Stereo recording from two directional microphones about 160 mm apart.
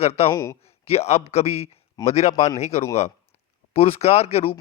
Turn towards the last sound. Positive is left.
turn(degrees=40)  # may be behind; listen again after turning